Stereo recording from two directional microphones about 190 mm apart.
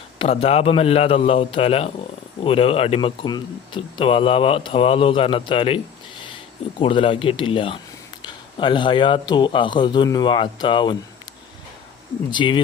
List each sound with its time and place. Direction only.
0.2 s a man's voice: 30° left (ahead or behind)
12.3 s speech: 25° left (ahead or behind)